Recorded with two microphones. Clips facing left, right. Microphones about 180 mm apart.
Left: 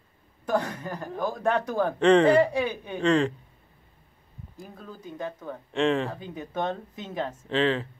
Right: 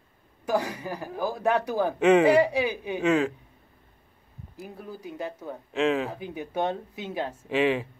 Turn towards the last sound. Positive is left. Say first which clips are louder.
# right 1 dB
turn(degrees=-10)  # may be behind; listen again after turning